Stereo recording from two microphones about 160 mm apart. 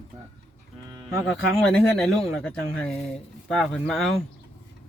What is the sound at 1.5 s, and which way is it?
Speech, centre (ahead or behind).